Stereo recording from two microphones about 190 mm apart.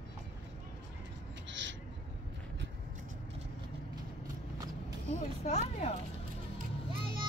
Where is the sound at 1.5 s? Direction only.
70° right (ahead or behind).